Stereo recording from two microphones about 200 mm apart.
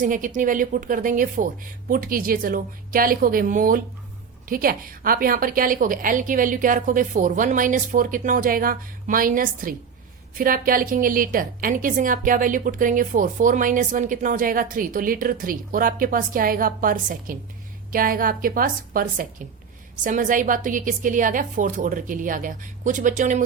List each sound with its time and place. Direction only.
0.0 s a woman's voice: 40° right (ahead or behind)